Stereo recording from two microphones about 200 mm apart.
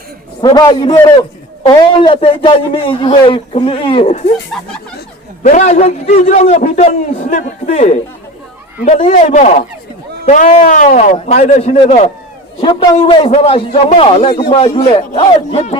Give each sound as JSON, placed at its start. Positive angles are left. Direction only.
{"t": 0.4, "sound": "a man's voice", "side_deg": 20}
{"t": 4.9, "sound": "a man's voice", "side_deg": 40}
{"t": 9.0, "sound": "a man's voice", "side_deg": 35}